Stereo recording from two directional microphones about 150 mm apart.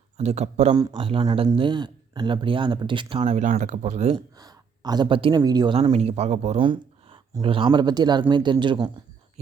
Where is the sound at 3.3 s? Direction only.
60° right (ahead or behind).